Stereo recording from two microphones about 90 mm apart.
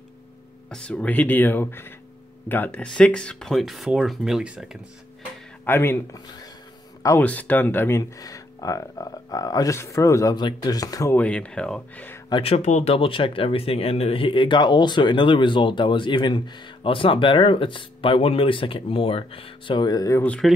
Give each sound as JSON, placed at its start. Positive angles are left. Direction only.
{"t": 0.7, "sound": "speech", "side_deg": 10}
{"t": 5.7, "sound": "speech", "side_deg": 25}
{"t": 7.2, "sound": "speech", "side_deg": 20}
{"t": 8.0, "sound": "speech", "side_deg": 40}
{"t": 10.3, "sound": "speech", "side_deg": 50}
{"t": 11.1, "sound": "speech", "side_deg": 15}
{"t": 12.4, "sound": "speech", "side_deg": 85}
{"t": 19.9, "sound": "speech", "side_deg": 40}
{"t": 20.4, "sound": "speech", "side_deg": 0}